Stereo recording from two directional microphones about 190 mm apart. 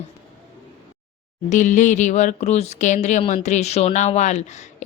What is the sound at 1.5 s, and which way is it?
Speech, 40° left (ahead or behind).